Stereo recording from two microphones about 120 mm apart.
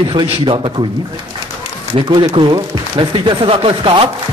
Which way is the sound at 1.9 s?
45° right (ahead or behind).